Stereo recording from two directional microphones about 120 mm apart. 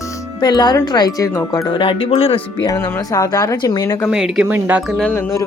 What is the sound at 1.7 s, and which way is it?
Speech, 45° left (ahead or behind).